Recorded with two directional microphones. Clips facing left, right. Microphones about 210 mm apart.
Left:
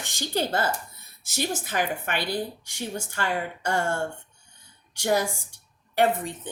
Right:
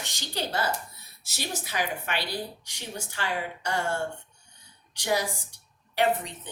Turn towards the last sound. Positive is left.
turn(degrees=50)  # may be behind; listen again after turning